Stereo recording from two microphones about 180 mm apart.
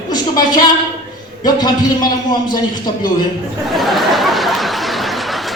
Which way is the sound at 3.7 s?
Centre (ahead or behind).